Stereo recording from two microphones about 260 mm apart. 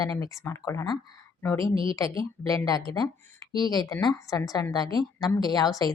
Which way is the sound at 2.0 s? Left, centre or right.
Centre.